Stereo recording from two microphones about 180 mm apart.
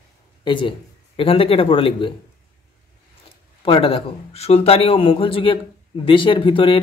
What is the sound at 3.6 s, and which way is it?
A man's voice, 30° left (ahead or behind).